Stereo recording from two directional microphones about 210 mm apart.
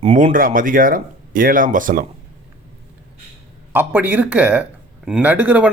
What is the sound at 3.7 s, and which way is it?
Speech, 10° right (ahead or behind).